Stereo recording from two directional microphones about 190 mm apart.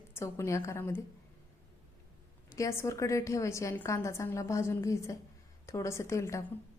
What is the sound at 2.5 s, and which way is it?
A woman's voice, 15° left (ahead or behind).